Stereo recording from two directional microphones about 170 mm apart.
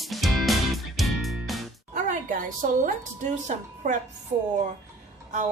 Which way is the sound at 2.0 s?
50° right (ahead or behind).